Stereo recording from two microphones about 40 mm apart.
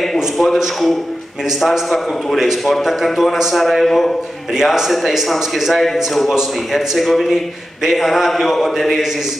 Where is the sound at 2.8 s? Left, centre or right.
Centre.